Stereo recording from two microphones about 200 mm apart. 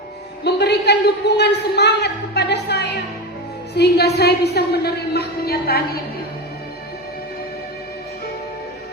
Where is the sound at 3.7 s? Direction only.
55° left (ahead or behind).